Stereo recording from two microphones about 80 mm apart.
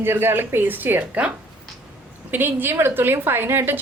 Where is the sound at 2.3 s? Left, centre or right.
Right.